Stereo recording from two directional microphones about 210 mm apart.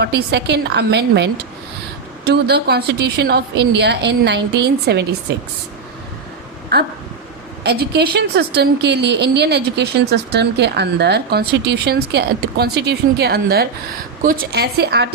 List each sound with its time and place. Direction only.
0.0 s a woman's voice: 50° right (ahead or behind)
6.7 s a woman's voice: 50° right (ahead or behind)